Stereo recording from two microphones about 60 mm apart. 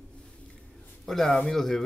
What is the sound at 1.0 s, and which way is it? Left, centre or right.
Speech, centre.